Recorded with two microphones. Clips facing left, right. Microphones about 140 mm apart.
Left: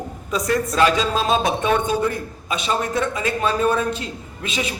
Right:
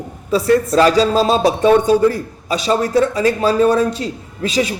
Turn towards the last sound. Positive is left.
turn(degrees=-35)  # may be behind; listen again after turning